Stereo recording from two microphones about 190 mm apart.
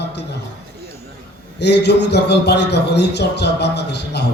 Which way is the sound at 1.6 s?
60° left (ahead or behind).